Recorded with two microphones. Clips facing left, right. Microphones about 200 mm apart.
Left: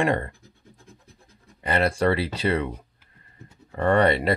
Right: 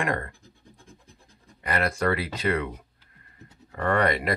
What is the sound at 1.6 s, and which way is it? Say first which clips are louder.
Speech: left 4 dB; 30° left (ahead or behind).